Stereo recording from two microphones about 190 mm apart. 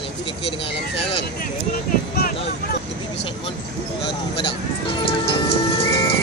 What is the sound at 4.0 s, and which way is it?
Music, 30° left (ahead or behind).